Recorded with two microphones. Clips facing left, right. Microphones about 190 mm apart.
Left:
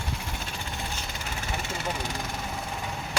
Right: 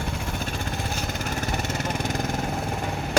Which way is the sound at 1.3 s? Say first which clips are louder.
Right 4 dB; 40° right (ahead or behind).